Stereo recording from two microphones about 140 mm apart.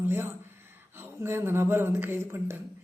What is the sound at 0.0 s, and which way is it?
Speech, 15° right (ahead or behind).